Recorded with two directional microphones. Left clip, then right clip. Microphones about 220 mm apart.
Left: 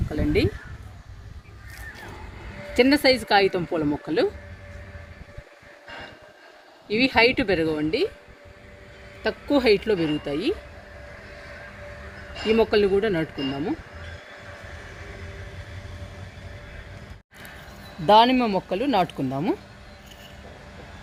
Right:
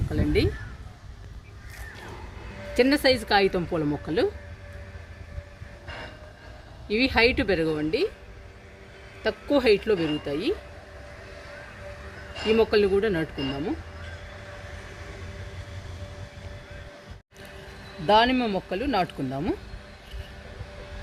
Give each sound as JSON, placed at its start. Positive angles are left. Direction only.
{"t": 0.1, "sound": "speech", "side_deg": 30}
{"t": 2.7, "sound": "speech", "side_deg": 35}
{"t": 6.8, "sound": "speech", "side_deg": 30}
{"t": 9.2, "sound": "speech", "side_deg": 40}
{"t": 12.3, "sound": "a sound", "side_deg": 0}
{"t": 12.5, "sound": "speech", "side_deg": 30}
{"t": 13.3, "sound": "speech", "side_deg": 0}
{"t": 18.0, "sound": "speech", "side_deg": 35}